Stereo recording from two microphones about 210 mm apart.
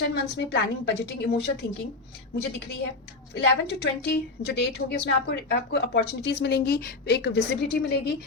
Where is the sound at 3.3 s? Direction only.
50° left (ahead or behind).